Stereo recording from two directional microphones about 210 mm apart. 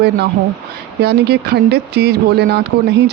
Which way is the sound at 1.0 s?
50° right (ahead or behind).